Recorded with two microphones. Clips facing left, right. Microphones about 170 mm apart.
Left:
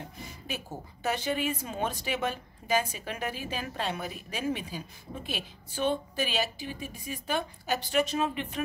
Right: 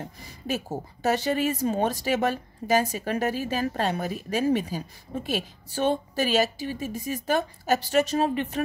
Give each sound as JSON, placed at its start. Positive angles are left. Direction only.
{"t": 0.2, "sound": "speech", "side_deg": -40}